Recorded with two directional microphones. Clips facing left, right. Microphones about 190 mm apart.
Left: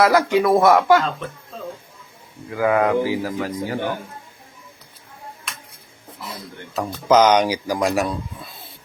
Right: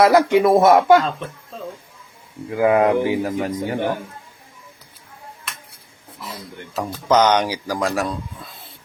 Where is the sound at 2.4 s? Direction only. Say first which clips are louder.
Right 3 dB; 25° right (ahead or behind).